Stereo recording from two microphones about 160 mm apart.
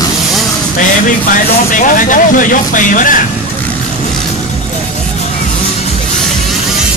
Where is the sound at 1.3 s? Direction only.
55° left (ahead or behind).